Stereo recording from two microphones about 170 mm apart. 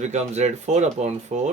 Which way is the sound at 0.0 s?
40° right (ahead or behind).